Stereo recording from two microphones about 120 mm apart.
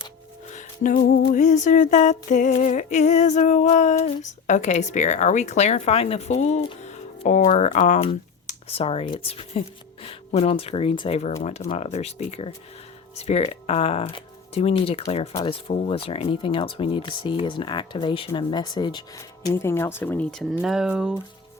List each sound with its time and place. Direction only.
0.5 s music: 90° left
1.3 s a sound: 90° left; by 6.6 s 70° left (ahead or behind)
6.8 s speech: 70° left (ahead or behind)
8.6 s speech: 55° left (ahead or behind)
11.8 s speech: 65° left (ahead or behind)
14.0 s speech: 45° left (ahead or behind)
14.5 s speech: 60° left (ahead or behind); by 19.0 s 40° left (ahead or behind)
19.1 s speech: 25° left (ahead or behind)
20.3 s speech: centre (ahead or behind)